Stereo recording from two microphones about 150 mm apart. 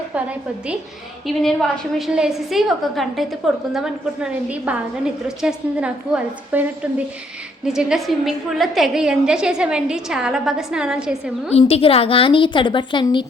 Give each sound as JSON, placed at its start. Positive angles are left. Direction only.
{"t": 1.3, "sound": "a woman's voice", "side_deg": 0}
{"t": 11.5, "sound": "a woman's voice", "side_deg": 40}